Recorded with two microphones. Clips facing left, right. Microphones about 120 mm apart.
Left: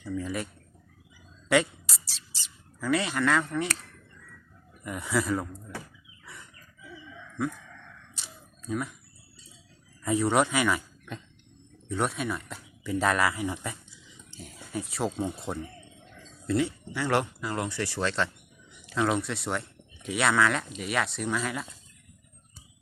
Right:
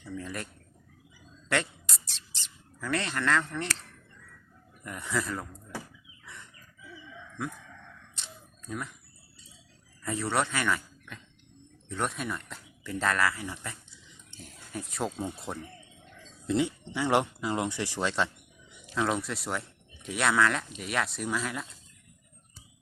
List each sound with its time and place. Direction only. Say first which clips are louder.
0.0 s speech: left 5 dB; 5° left (ahead or behind)
1.5 s mouse: left 6 dB; 5° left (ahead or behind)
4.8 s speech: left 4 dB; 10° left (ahead or behind)
8.1 s camera: even; 5° left (ahead or behind)
10.0 s speech: left 5 dB; 15° left (ahead or behind)
11.9 s speech: left 3 dB; 5° left (ahead or behind)
14.3 s speech: left 4 dB; centre (ahead or behind)
16.5 s speech: left 1 dB; 20° right (ahead or behind)
18.9 s speech: left 2 dB; centre (ahead or behind)